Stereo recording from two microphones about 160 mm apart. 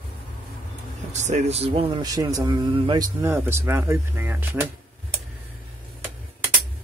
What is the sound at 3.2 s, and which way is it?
Speech, 15° right (ahead or behind).